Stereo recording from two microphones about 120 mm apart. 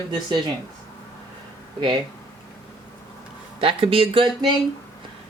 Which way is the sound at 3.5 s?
50° right (ahead or behind).